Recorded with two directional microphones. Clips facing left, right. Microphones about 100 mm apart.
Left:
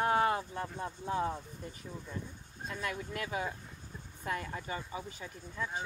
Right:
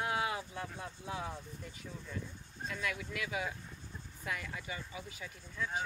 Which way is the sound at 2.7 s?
40° left (ahead or behind).